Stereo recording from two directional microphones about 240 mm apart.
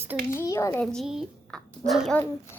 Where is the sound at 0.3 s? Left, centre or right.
Centre.